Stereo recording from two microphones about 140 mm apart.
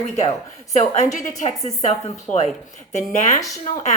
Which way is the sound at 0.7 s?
55° left (ahead or behind).